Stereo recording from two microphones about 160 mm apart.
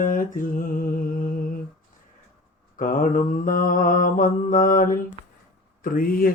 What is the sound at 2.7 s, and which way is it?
Mantra, 60° left (ahead or behind).